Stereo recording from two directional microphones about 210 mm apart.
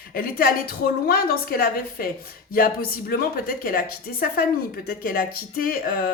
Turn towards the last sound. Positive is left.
turn(degrees=45)  # may be behind; listen again after turning